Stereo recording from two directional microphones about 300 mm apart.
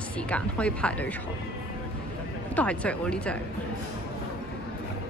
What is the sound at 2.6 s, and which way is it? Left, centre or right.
Speech, centre.